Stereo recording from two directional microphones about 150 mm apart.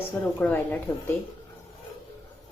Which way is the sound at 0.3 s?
10° left (ahead or behind).